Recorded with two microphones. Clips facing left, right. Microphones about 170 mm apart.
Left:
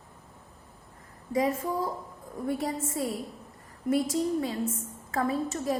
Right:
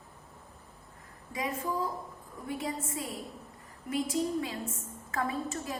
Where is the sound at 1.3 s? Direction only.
40° left (ahead or behind).